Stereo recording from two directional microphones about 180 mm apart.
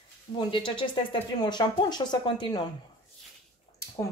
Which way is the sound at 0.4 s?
25° left (ahead or behind).